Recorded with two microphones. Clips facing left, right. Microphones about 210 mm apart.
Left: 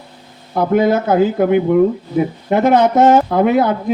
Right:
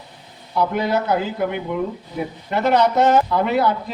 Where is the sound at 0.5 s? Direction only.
50° left (ahead or behind).